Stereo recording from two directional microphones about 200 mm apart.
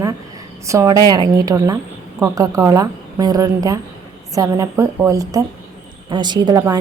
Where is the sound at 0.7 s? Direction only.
15° right (ahead or behind).